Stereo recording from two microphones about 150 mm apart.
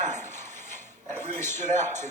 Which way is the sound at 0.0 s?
55° right (ahead or behind).